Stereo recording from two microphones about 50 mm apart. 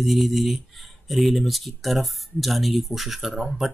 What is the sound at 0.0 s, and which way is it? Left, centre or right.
Speech, centre.